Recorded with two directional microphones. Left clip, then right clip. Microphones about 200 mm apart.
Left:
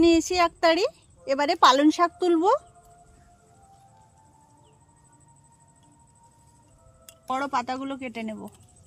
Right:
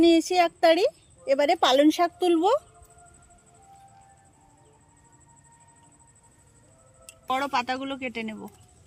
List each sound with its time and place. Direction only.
0.0 s a woman's voice: 45° left (ahead or behind)
7.3 s a woman's voice: 50° left (ahead or behind)